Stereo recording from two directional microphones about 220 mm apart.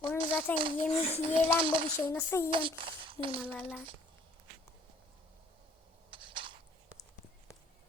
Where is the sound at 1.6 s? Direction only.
25° right (ahead or behind).